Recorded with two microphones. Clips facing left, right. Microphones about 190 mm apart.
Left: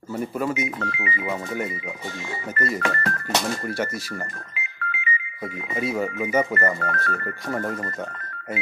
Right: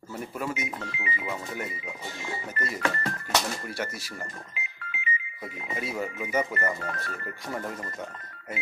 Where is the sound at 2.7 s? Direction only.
75° left (ahead or behind).